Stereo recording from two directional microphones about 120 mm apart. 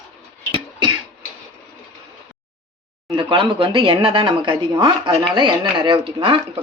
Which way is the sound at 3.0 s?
45° right (ahead or behind).